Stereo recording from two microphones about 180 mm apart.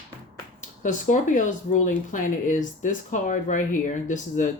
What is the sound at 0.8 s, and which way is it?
Speech, 45° left (ahead or behind).